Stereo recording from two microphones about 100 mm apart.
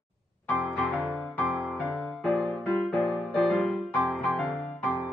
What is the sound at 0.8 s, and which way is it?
Music, 15° left (ahead or behind).